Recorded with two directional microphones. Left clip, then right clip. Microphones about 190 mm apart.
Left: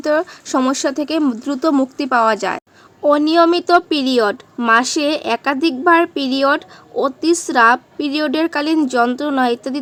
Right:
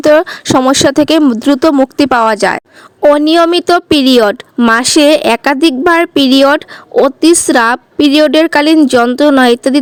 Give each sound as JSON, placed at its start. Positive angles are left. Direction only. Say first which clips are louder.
{"t": 0.0, "sound": "speech", "louder": "right 10 dB", "side_deg": -45}